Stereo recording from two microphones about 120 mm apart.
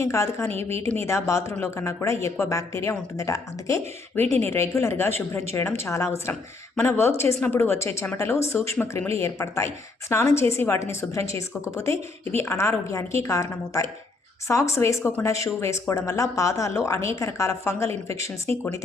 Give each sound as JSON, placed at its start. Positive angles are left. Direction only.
{"t": 0.0, "sound": "a woman's voice", "side_deg": 25}